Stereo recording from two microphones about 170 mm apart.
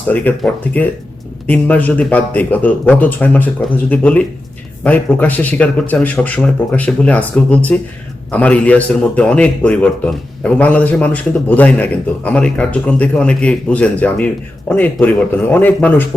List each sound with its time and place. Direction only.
0.1 s a man's voice: 10° left (ahead or behind)